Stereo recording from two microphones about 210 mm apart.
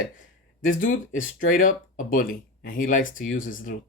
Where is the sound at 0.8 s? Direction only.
40° left (ahead or behind).